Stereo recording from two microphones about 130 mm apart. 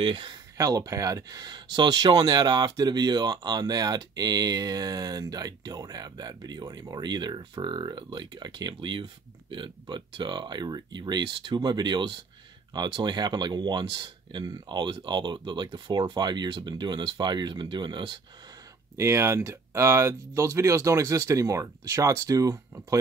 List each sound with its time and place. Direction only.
0.0 s speech: 40° right (ahead or behind)
0.6 s speech: 25° right (ahead or behind)
18.9 s speech: 20° right (ahead or behind)